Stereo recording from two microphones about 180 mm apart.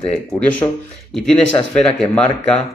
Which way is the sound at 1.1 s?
5° left (ahead or behind).